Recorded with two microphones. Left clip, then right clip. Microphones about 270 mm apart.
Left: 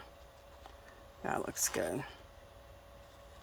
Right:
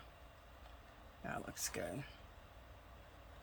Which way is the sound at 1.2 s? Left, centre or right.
Centre.